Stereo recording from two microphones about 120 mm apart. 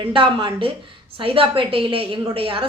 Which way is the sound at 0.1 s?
45° right (ahead or behind).